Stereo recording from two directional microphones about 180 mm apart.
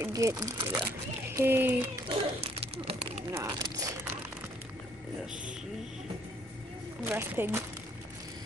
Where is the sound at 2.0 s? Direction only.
30° right (ahead or behind).